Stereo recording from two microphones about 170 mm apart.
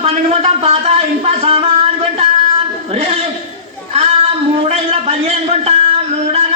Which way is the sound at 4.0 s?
35° right (ahead or behind).